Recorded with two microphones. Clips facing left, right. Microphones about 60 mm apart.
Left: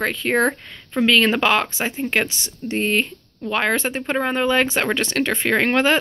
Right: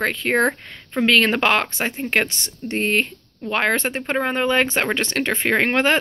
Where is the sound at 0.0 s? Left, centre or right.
Right.